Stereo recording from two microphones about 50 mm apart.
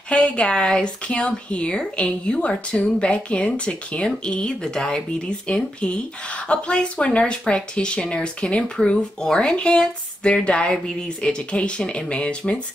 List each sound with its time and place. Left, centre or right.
0.1 s speech: left